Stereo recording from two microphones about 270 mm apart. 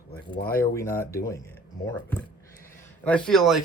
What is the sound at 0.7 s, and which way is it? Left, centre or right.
Speech, centre.